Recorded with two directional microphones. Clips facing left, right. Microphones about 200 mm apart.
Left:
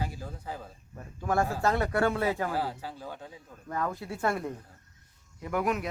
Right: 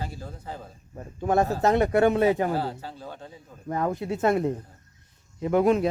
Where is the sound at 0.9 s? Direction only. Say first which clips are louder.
Right 5 dB; 25° right (ahead or behind).